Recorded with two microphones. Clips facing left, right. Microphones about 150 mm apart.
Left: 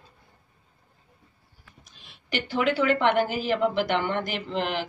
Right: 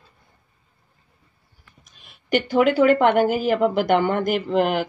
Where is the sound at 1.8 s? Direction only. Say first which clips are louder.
Right 1 dB; 50° right (ahead or behind).